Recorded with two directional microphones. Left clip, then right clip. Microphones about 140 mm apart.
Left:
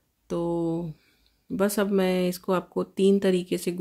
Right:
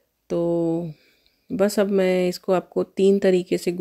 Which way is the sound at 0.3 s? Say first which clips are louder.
Right 5 dB; 30° right (ahead or behind).